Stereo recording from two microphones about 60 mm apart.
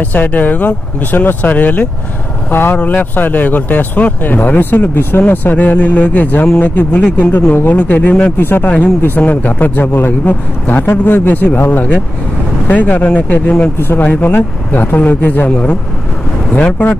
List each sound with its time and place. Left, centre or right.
0.0 s speech: left
2.5 s speech: left
13.7 s speech: left
14.0 s speech: left
14.3 s speech: left